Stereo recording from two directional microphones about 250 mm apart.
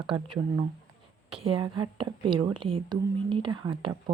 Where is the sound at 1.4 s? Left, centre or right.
Right.